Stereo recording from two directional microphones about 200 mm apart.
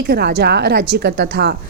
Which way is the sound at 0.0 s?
55° right (ahead or behind).